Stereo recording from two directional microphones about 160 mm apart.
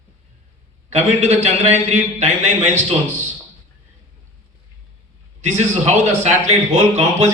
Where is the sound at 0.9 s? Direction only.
45° right (ahead or behind).